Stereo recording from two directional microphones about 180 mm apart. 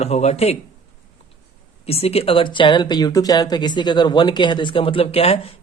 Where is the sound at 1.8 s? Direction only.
35° left (ahead or behind).